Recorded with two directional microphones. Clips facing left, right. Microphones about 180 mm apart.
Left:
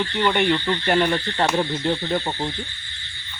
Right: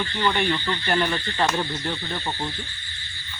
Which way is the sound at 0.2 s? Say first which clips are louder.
Left 4 dB; 15° left (ahead or behind).